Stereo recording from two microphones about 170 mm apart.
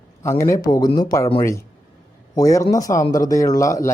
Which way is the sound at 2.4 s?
20° left (ahead or behind).